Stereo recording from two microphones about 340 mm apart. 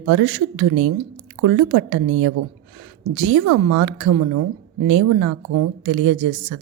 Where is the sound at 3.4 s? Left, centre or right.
Right.